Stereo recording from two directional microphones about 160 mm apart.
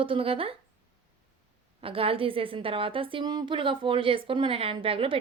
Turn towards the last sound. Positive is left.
turn(degrees=-35)  # may be behind; listen again after turning